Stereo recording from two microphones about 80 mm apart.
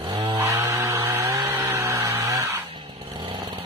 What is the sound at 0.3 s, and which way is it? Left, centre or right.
Chainsaw, right.